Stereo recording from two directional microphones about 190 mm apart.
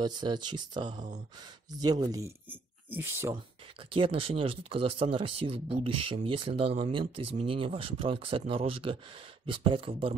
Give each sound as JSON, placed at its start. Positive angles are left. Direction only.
{"t": 0.0, "sound": "speech", "side_deg": -25}
{"t": 3.9, "sound": "speech", "side_deg": -30}